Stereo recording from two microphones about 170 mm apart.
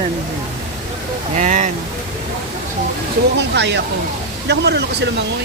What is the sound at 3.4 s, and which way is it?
Speech, 90° right.